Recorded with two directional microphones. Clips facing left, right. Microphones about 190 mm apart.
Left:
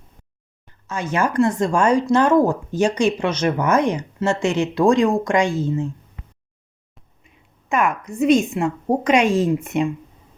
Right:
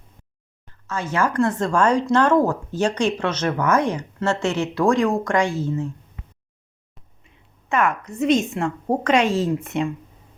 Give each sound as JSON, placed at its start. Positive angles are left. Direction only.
{"t": 0.7, "sound": "speech", "side_deg": 15}
{"t": 7.7, "sound": "speech", "side_deg": 15}